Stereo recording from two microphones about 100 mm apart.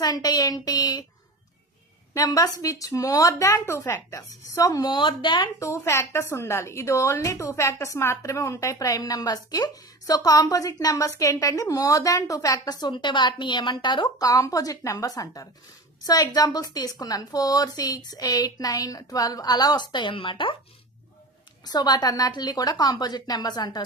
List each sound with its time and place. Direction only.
0.0 s a woman's voice: 40° left (ahead or behind)
2.1 s a woman's voice: 40° left (ahead or behind)
4.9 s speech: 55° left (ahead or behind)
5.5 s a woman's voice: 30° left (ahead or behind); by 20.6 s 55° left (ahead or behind)
21.6 s a woman's voice: 40° left (ahead or behind)